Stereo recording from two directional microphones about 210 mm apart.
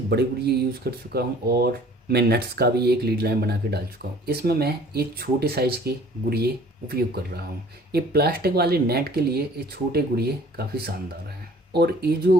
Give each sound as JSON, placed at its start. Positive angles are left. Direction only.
{"t": 0.1, "sound": "speech", "side_deg": -50}